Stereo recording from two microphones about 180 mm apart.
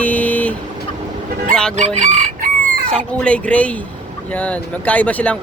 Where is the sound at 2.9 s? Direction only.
5° left (ahead or behind).